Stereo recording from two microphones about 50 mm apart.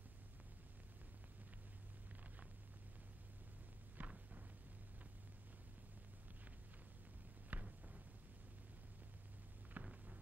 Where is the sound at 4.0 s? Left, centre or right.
Right.